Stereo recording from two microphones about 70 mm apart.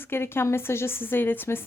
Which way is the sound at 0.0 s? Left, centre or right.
Left.